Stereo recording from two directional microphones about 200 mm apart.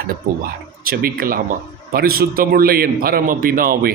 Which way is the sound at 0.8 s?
45° right (ahead or behind).